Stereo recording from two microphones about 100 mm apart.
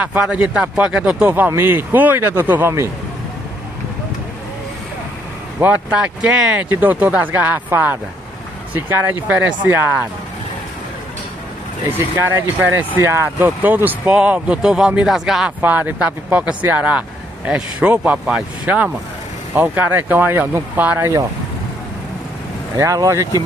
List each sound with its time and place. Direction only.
0.0 s speech: 10° right (ahead or behind)
5.6 s speech: 15° right (ahead or behind)
11.9 s speech: 20° right (ahead or behind); by 15.5 s 5° right (ahead or behind)
15.6 s speech: 15° right (ahead or behind)
22.8 s speech: 30° right (ahead or behind)